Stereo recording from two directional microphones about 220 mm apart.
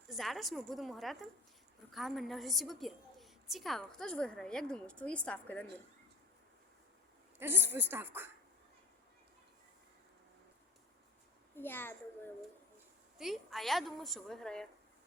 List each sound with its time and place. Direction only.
0.1 s a woman's voice: centre (ahead or behind)
7.3 s a woman's voice: 10° right (ahead or behind)
11.5 s a child's voice: 10° left (ahead or behind)
13.1 s a woman's voice: centre (ahead or behind)